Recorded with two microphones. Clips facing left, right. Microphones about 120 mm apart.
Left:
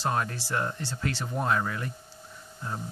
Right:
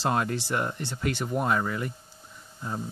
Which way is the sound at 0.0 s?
20° right (ahead or behind).